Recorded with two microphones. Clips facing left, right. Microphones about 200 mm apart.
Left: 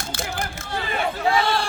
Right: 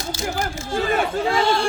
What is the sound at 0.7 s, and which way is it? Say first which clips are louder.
Speech: right 5 dB; 45° right (ahead or behind).